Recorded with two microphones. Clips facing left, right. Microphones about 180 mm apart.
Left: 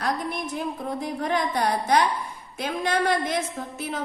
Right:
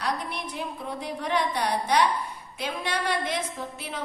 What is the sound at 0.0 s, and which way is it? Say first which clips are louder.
A woman's voice: left 3 dB; 45° left (ahead or behind).